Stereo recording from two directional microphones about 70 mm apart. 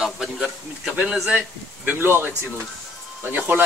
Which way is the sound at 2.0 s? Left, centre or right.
Right.